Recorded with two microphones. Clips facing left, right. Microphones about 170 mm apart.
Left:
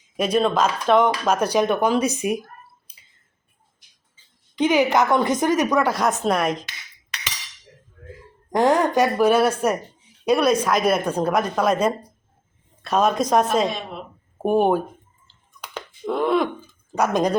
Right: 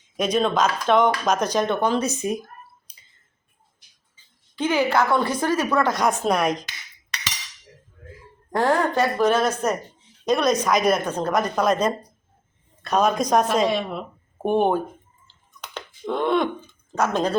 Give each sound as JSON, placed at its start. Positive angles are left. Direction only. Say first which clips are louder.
{"t": 0.2, "sound": "a woman's voice", "louder": "left 1 dB", "side_deg": 5}
{"t": 4.5, "sound": "a woman's voice", "louder": "left 3 dB", "side_deg": 15}
{"t": 8.5, "sound": "a woman's voice", "louder": "left 3 dB", "side_deg": 15}
{"t": 15.6, "sound": "a sound", "louder": "left 2 dB", "side_deg": 5}
{"t": 16.9, "sound": "a woman's voice", "louder": "left 2 dB", "side_deg": 15}